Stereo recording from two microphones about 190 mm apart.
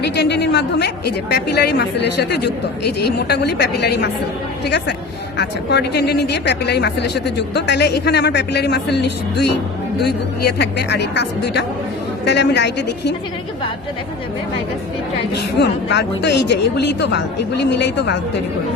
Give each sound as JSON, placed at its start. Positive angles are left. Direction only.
{"t": 0.0, "sound": "speech", "side_deg": 65}
{"t": 15.3, "sound": "speech", "side_deg": 60}